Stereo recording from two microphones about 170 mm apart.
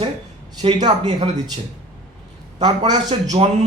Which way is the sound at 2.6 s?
25° right (ahead or behind).